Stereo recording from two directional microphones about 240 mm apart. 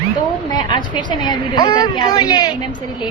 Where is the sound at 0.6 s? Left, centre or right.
Centre.